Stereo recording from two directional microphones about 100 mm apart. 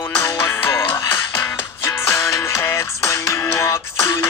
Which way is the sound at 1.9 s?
30° left (ahead or behind).